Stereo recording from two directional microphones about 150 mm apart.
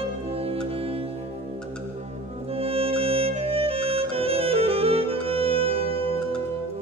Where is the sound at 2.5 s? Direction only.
40° right (ahead or behind).